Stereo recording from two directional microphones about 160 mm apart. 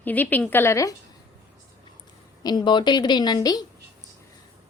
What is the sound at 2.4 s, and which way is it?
A woman's voice, 25° left (ahead or behind).